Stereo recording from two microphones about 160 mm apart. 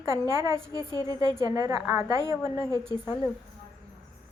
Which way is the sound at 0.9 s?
25° left (ahead or behind).